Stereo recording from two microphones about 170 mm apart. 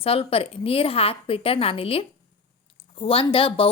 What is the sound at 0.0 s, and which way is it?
A woman's voice, 35° left (ahead or behind).